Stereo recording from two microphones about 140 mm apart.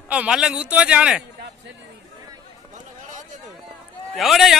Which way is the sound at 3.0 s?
65° right (ahead or behind).